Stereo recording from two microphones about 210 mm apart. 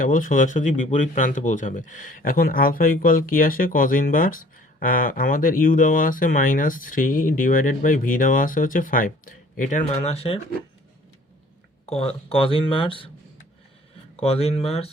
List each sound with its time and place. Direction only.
0.0 s speech: 40° left (ahead or behind)
11.9 s speech: 30° left (ahead or behind)
14.2 s speech: 30° left (ahead or behind)